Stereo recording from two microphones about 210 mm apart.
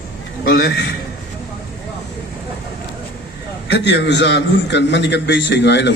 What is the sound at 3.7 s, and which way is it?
A man's voice, 55° left (ahead or behind).